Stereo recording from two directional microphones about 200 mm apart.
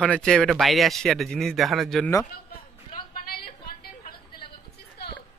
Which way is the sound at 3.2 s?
50° left (ahead or behind).